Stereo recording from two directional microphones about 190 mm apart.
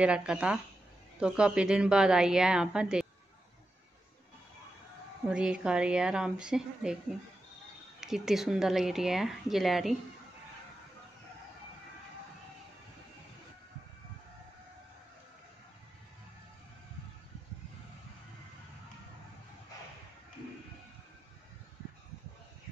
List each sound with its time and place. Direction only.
0.0 s a woman's voice: 5° right (ahead or behind)
5.2 s a woman's voice: 5° right (ahead or behind)
8.0 s a woman's voice: centre (ahead or behind)